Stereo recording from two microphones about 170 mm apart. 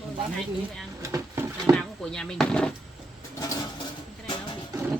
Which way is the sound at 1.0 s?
20° right (ahead or behind).